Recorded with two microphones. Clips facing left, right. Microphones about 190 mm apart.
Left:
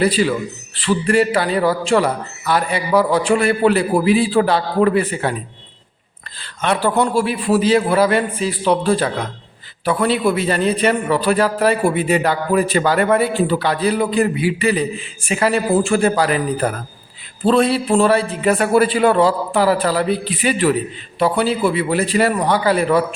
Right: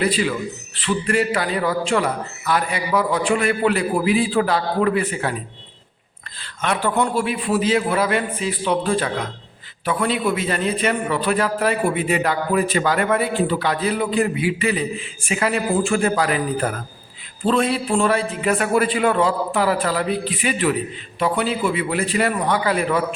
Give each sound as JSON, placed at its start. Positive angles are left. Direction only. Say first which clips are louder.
{"t": 0.0, "sound": "a man's voice", "louder": "left 4 dB", "side_deg": 35}
{"t": 6.4, "sound": "a man's voice", "louder": "left 4 dB", "side_deg": 30}
{"t": 17.4, "sound": "a man's voice", "louder": "left 4 dB", "side_deg": 35}